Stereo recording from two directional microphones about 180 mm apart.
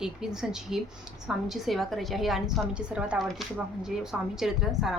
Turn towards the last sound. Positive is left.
turn(degrees=0)  # may be behind; listen again after turning